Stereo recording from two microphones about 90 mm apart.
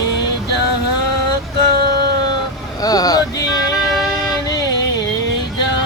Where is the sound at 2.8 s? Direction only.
45° left (ahead or behind).